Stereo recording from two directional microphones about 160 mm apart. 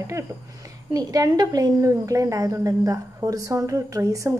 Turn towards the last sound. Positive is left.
turn(degrees=-20)  # may be behind; listen again after turning